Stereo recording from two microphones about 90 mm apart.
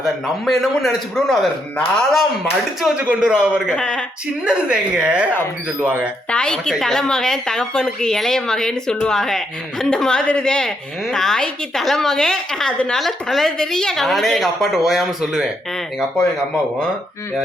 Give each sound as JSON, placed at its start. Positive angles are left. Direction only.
{"t": 0.0, "sound": "a woman's voice", "side_deg": 0}
{"t": 3.0, "sound": "a woman's voice", "side_deg": -15}
{"t": 3.8, "sound": "a woman's voice", "side_deg": 10}
{"t": 4.4, "sound": "a woman's voice", "side_deg": -10}
{"t": 6.3, "sound": "a woman's voice", "side_deg": 10}